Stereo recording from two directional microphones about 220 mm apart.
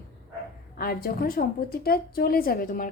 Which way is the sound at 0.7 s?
45° left (ahead or behind).